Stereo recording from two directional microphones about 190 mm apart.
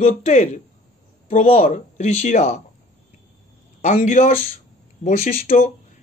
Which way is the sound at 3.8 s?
40° left (ahead or behind).